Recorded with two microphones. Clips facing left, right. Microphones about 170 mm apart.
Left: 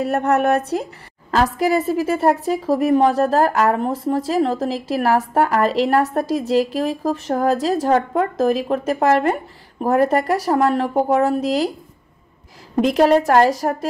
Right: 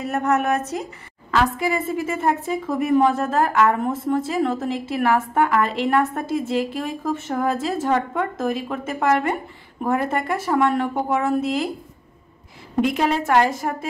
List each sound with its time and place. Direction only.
0.1 s a woman's voice: 35° left (ahead or behind)
0.6 s speech: 65° left (ahead or behind)
1.3 s a woman's voice: 40° left (ahead or behind)
12.8 s a woman's voice: 40° left (ahead or behind)